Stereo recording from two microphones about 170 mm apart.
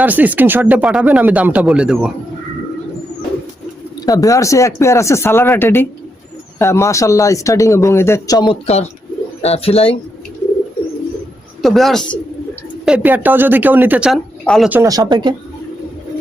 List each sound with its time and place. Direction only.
0.0 s speech: 10° right (ahead or behind)
4.0 s a man's voice: 20° left (ahead or behind)
8.6 s speech: 40° left (ahead or behind)
11.6 s a man's voice: centre (ahead or behind)
14.4 s speech: 5° left (ahead or behind)
14.7 s speech: 15° right (ahead or behind)